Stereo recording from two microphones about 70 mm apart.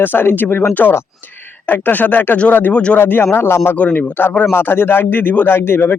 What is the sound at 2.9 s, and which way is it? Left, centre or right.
Speech, left.